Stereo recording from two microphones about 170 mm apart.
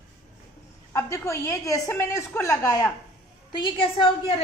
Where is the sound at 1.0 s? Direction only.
15° left (ahead or behind).